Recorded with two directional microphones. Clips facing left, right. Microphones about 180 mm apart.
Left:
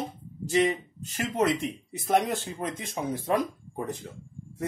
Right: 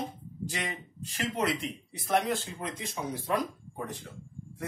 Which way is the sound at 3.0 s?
40° left (ahead or behind).